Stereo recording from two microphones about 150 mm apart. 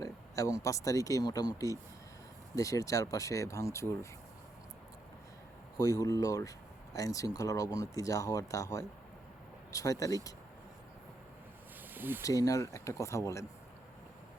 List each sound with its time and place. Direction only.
0.0 s speech: 20° left (ahead or behind)
5.7 s speech: 25° left (ahead or behind)
11.9 s speech: 15° right (ahead or behind)
12.2 s speech: 20° left (ahead or behind)